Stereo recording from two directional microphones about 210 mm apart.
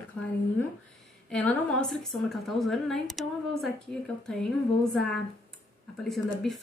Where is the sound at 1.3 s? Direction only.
5° left (ahead or behind).